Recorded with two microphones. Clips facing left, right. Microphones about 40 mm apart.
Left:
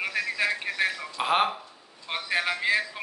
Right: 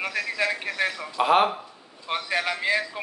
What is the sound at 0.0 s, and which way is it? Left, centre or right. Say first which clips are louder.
Speech: right 1 dB; centre.